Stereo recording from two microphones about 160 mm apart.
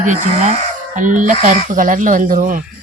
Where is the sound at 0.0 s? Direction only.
50° right (ahead or behind).